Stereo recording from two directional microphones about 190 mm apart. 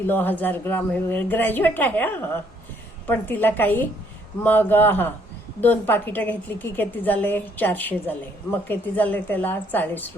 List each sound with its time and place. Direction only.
0.0 s a woman's voice: 10° left (ahead or behind)